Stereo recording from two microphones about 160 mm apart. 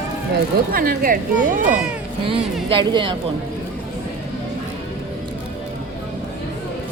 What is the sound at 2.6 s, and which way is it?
Speech, 30° right (ahead or behind).